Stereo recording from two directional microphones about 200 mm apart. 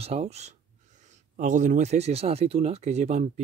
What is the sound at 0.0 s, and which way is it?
Speech, 30° right (ahead or behind).